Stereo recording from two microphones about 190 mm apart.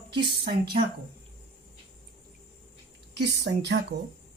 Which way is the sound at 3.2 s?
65° right (ahead or behind).